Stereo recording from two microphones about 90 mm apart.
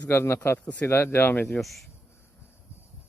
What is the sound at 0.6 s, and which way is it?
Speech, 15° left (ahead or behind).